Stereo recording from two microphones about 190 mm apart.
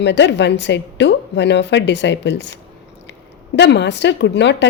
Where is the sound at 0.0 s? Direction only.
65° left (ahead or behind).